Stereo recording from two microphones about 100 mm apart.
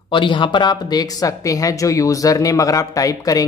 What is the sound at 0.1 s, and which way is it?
Speech, 55° left (ahead or behind).